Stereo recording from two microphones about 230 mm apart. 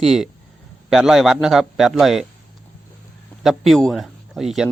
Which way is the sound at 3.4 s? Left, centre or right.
Centre.